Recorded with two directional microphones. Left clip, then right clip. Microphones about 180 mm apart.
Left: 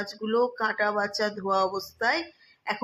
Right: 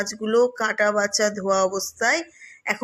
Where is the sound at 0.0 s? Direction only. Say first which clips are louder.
Right 6 dB; 25° right (ahead or behind).